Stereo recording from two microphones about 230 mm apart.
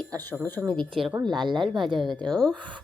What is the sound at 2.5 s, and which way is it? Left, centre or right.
Speech, right.